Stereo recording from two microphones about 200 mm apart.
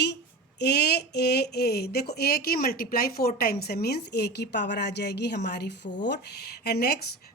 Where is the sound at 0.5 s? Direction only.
55° left (ahead or behind).